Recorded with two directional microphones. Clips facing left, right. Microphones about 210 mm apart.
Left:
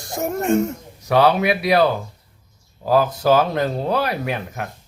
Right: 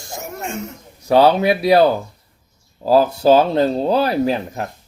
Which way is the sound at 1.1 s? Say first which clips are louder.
Right 3 dB; 30° right (ahead or behind).